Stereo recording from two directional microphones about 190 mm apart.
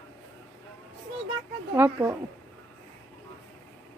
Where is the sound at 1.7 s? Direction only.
10° right (ahead or behind).